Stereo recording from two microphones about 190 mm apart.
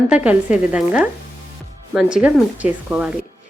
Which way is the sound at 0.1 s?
5° right (ahead or behind).